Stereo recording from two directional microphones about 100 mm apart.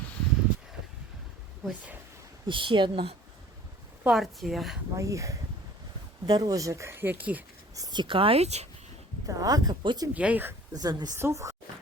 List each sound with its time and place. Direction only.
1.6 s speech: 15° right (ahead or behind)
2.5 s speech: 55° right (ahead or behind)
4.0 s a woman's voice: centre (ahead or behind)
4.9 s speech: 30° right (ahead or behind); by 7.4 s 15° right (ahead or behind)
7.8 s speech: 40° right (ahead or behind)
8.0 s speech: 60° right (ahead or behind); by 8.6 s 90° right
9.2 s speech: 35° right (ahead or behind)
10.2 s speech: 15° right (ahead or behind)
10.8 s speech: 40° right (ahead or behind)
11.2 s speech: 30° right (ahead or behind)